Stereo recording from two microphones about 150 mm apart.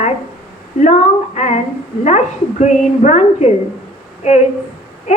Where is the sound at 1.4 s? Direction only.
50° left (ahead or behind).